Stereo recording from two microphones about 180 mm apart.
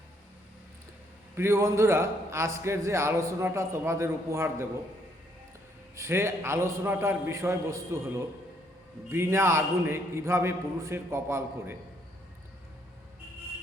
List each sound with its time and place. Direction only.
1.4 s a man's voice: 15° right (ahead or behind)
6.0 s a man's voice: 15° right (ahead or behind)
9.0 s a man's voice: 15° right (ahead or behind)